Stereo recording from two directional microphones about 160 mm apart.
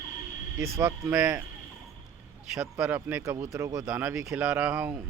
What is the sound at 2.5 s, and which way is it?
Speech, 5° right (ahead or behind).